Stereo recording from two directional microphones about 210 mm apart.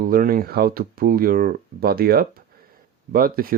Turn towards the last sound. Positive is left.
turn(degrees=-45)  # may be behind; listen again after turning